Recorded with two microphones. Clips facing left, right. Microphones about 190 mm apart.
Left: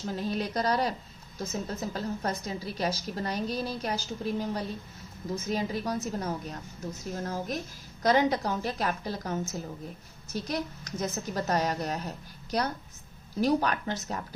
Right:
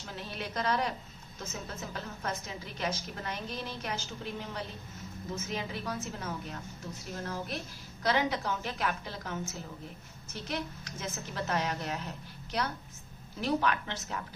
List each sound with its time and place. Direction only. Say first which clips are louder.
0.1 s a woman's voice: left 8 dB; 40° left (ahead or behind)